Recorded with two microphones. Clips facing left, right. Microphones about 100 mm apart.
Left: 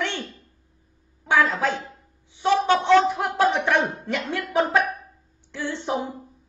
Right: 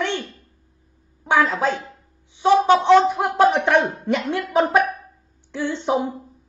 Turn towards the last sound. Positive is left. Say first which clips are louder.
# right 5 dB
turn(degrees=-20)  # may be behind; listen again after turning